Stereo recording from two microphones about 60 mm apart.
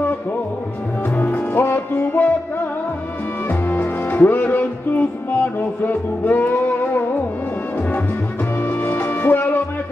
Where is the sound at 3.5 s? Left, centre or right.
Left.